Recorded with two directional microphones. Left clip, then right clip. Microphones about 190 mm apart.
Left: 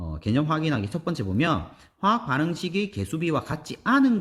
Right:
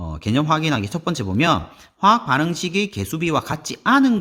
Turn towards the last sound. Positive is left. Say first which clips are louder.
# right 5 dB
turn(degrees=-25)  # may be behind; listen again after turning